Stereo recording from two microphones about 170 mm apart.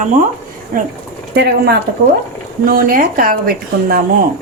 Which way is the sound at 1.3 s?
75° right (ahead or behind).